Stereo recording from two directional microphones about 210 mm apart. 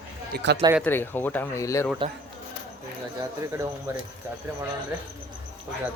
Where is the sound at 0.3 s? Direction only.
55° right (ahead or behind).